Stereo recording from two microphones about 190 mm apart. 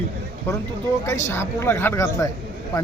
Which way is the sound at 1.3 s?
15° left (ahead or behind).